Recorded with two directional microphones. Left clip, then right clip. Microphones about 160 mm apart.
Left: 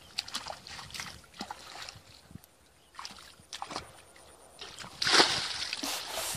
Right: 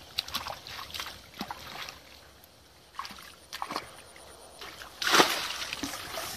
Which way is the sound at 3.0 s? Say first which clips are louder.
Right 2 dB; 10° right (ahead or behind).